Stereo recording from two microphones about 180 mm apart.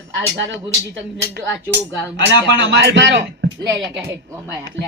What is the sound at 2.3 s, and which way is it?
Speech, 80° right.